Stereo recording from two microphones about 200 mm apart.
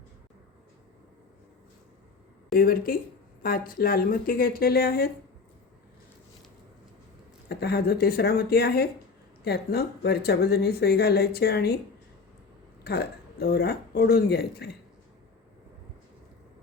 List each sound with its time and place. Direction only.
2.6 s speech: 45° left (ahead or behind)
7.4 s speech: 55° left (ahead or behind)
12.8 s speech: 55° left (ahead or behind)